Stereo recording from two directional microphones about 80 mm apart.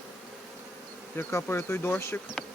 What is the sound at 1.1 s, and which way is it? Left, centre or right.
Speech, left.